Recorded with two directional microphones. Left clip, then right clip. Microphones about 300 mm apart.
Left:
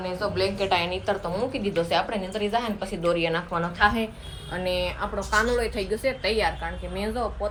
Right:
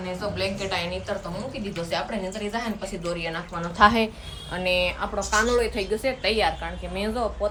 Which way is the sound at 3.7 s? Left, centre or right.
Right.